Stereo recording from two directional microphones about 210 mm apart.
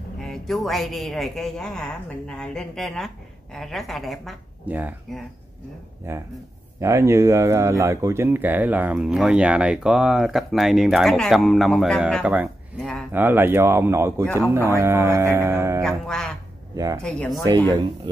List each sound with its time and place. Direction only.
0.2 s speech: centre (ahead or behind)
15.8 s speech: 5° left (ahead or behind)
16.7 s speech: 15° right (ahead or behind)
17.0 s speech: 5° left (ahead or behind)